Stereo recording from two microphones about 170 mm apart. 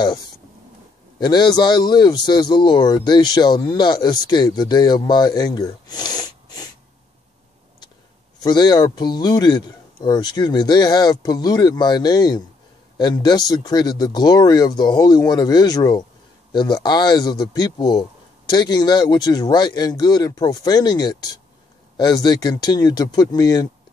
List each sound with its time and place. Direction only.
1.2 s speech: 25° left (ahead or behind)
8.4 s speech: 25° left (ahead or behind)